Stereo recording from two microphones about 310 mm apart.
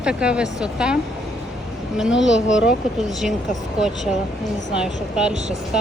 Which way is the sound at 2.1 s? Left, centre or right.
Left.